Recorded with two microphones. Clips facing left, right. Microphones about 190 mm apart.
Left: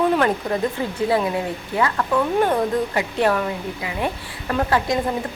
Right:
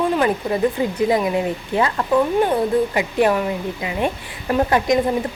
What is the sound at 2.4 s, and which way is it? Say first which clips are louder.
Speech: right 2 dB; 10° right (ahead or behind).